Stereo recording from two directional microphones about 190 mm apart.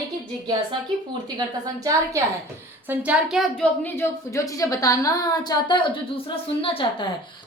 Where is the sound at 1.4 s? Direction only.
20° right (ahead or behind).